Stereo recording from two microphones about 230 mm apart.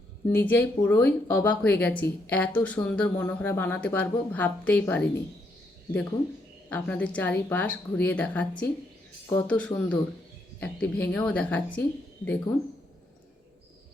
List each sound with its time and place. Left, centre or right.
0.3 s speech: centre
6.7 s speech: centre